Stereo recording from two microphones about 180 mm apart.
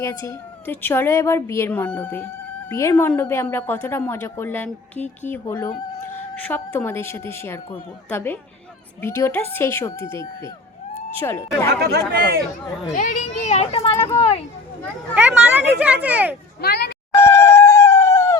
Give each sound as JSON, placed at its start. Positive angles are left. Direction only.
{"t": 0.0, "sound": "speech", "side_deg": 15}
{"t": 11.7, "sound": "speech", "side_deg": -60}
{"t": 13.0, "sound": "speech", "side_deg": 45}
{"t": 15.1, "sound": "speech", "side_deg": -10}
{"t": 16.6, "sound": "speech", "side_deg": 65}
{"t": 17.2, "sound": "a sound", "side_deg": 15}